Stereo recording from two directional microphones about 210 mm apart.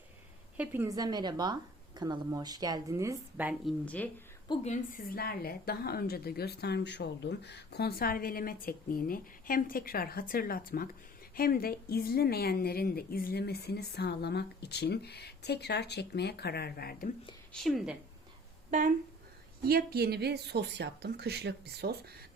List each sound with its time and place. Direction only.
0.5 s a woman's voice: 10° right (ahead or behind)
4.4 s a woman's voice: 35° left (ahead or behind)
17.5 s a woman's voice: centre (ahead or behind)
18.7 s speech: 35° right (ahead or behind)
19.6 s speech: 45° right (ahead or behind)